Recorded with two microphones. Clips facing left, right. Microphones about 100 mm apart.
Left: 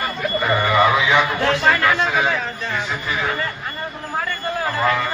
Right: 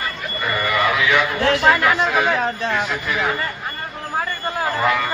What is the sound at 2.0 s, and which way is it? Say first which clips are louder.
Speech: right 2 dB; centre (ahead or behind).